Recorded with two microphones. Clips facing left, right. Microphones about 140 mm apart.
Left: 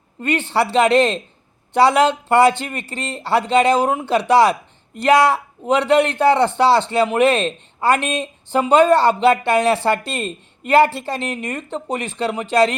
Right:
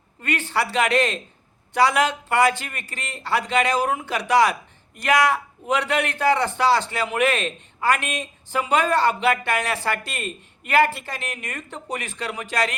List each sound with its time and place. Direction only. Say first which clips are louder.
0.2 s a man's voice: left 6 dB; 25° left (ahead or behind)